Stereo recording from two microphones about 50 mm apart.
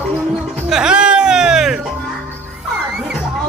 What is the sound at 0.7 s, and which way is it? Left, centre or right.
Music, centre.